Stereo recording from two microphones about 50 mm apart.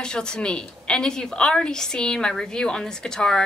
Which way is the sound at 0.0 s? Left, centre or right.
Centre.